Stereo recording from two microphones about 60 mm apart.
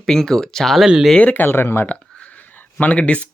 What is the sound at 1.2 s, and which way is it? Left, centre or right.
Speech, left.